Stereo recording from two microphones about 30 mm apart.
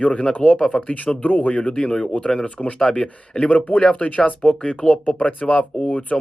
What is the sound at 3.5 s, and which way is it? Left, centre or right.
Speech, left.